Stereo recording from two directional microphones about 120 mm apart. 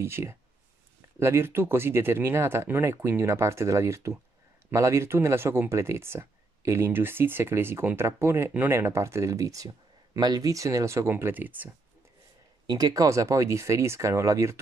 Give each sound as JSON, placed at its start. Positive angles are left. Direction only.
{"t": 0.0, "sound": "speech", "side_deg": -20}
{"t": 12.6, "sound": "speech", "side_deg": -30}